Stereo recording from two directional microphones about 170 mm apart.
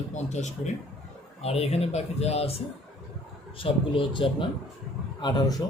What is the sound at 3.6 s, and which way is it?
Speech, 30° left (ahead or behind).